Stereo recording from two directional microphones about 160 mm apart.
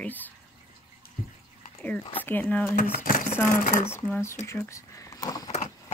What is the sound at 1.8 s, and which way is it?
Speech, 10° left (ahead or behind).